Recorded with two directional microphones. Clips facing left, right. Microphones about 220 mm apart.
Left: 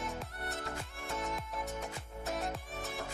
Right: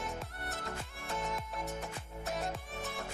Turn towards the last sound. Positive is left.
turn(degrees=0)  # may be behind; listen again after turning